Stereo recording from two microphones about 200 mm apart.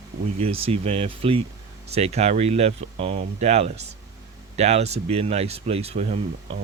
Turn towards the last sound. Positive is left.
turn(degrees=-30)  # may be behind; listen again after turning